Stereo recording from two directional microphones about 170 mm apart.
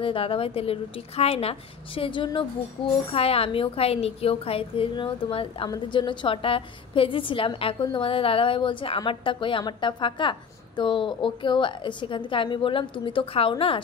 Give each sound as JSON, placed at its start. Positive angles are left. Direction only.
{"t": 0.0, "sound": "a woman's voice", "side_deg": 30}